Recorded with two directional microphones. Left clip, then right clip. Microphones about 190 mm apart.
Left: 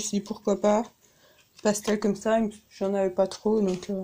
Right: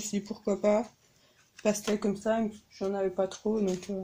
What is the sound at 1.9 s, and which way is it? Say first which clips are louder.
Speech: left 5 dB; 40° left (ahead or behind).